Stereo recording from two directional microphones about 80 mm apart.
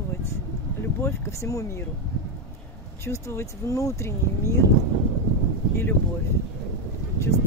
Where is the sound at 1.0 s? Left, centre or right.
Left.